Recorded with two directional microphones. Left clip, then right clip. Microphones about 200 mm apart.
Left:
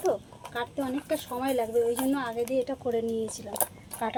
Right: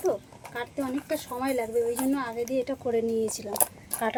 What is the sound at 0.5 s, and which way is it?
Speech, centre (ahead or behind).